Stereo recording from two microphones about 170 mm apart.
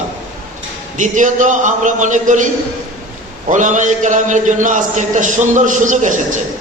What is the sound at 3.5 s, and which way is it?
A man's voice, 45° right (ahead or behind).